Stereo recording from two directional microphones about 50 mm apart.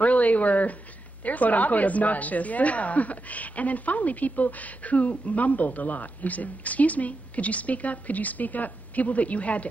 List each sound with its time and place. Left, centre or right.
0.0 s a woman's voice: left